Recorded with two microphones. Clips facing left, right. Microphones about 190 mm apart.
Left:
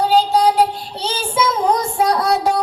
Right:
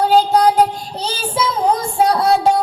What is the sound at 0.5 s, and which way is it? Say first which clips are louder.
Child singing: right 1 dB; 40° right (ahead or behind).